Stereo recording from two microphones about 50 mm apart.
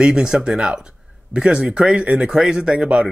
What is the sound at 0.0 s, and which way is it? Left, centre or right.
Speech, centre.